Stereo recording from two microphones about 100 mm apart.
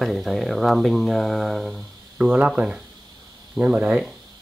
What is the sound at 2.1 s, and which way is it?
Speech, 10° right (ahead or behind).